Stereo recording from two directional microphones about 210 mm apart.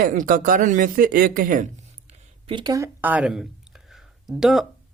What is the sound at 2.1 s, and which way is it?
Speech, 25° right (ahead or behind).